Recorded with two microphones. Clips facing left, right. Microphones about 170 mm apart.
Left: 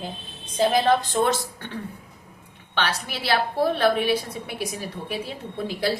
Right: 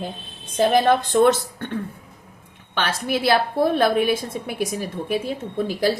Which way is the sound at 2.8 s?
50° right (ahead or behind).